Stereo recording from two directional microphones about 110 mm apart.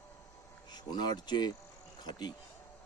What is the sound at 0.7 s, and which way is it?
Speech, 40° left (ahead or behind).